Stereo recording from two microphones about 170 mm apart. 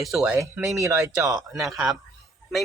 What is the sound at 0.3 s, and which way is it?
Speech, 15° right (ahead or behind).